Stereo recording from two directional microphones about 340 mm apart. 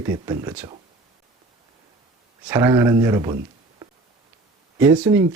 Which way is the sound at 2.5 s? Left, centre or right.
Centre.